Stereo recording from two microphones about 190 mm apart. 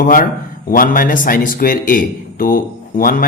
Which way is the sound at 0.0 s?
45° left (ahead or behind).